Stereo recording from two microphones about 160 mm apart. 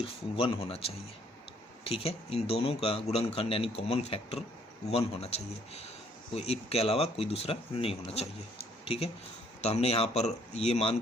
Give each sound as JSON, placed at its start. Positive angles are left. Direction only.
{"t": 0.3, "sound": "speech", "side_deg": 35}
{"t": 6.3, "sound": "speech", "side_deg": 40}
{"t": 9.6, "sound": "speech", "side_deg": 45}